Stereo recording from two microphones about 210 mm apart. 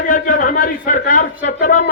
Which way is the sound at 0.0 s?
40° left (ahead or behind).